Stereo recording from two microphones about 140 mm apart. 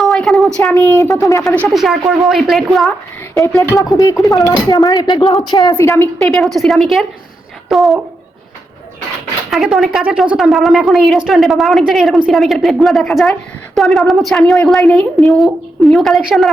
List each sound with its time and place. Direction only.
0.0 s a sound: centre (ahead or behind)
0.7 s speech: 20° left (ahead or behind)
1.7 s a woman's voice: centre (ahead or behind)
3.9 s speech: 25° left (ahead or behind)
6.1 s a woman's voice: 5° left (ahead or behind)
9.5 s a woman's voice: centre (ahead or behind)